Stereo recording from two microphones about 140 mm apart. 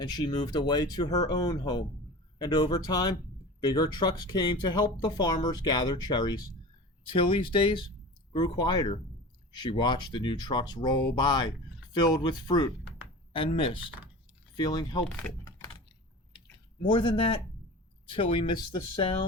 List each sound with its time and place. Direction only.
0.0 s speech: 30° left (ahead or behind)
16.8 s speech: 35° left (ahead or behind)